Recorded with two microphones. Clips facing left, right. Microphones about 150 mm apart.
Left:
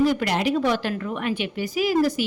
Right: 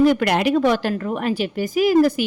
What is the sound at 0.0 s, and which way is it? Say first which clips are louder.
A woman's voice: right 5 dB; 60° right (ahead or behind).